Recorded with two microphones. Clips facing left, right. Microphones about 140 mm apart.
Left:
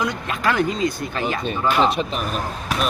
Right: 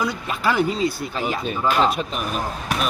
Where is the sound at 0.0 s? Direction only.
5° right (ahead or behind).